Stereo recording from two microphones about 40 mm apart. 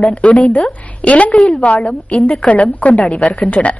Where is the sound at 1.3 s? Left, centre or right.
Centre.